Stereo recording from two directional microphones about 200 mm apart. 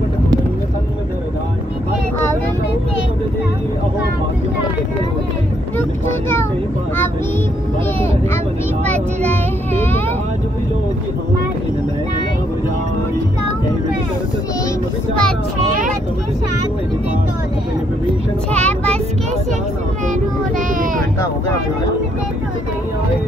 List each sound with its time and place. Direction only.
5.8 s speech: 10° left (ahead or behind)
9.2 s speech: 10° left (ahead or behind)
18.5 s child singing: 5° left (ahead or behind)
20.1 s child singing: 40° right (ahead or behind)